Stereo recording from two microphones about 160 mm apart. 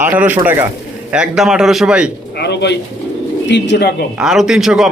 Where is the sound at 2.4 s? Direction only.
90° left.